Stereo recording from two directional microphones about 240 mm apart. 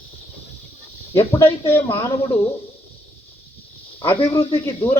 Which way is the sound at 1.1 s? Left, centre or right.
Centre.